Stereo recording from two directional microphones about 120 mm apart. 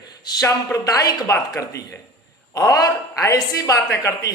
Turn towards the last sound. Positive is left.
turn(degrees=25)  # may be behind; listen again after turning